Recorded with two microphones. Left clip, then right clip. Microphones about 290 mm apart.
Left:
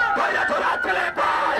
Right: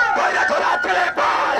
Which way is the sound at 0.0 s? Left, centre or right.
Right.